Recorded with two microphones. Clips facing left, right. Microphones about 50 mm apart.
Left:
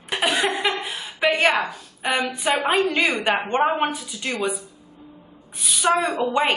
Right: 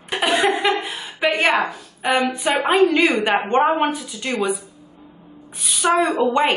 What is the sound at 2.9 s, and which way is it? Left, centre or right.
Speech, right.